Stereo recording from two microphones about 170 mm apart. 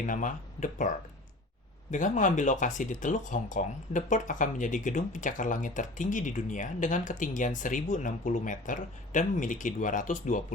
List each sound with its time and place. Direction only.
0.0 s speech: 50° left (ahead or behind)